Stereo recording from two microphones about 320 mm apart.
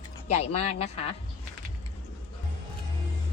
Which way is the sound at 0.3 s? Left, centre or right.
Centre.